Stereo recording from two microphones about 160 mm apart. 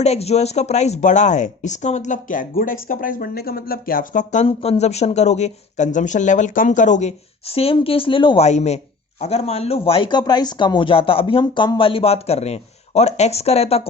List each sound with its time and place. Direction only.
0.0 s speech: 40° left (ahead or behind)
7.5 s speech: 35° left (ahead or behind)
8.4 s speech: 45° left (ahead or behind)